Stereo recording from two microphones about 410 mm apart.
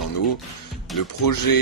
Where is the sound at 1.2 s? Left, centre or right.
Left.